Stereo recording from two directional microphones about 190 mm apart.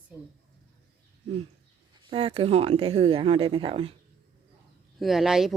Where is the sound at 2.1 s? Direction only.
30° right (ahead or behind).